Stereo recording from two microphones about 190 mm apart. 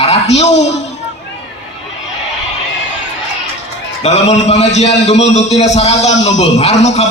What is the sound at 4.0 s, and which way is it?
A man's voice, 35° left (ahead or behind).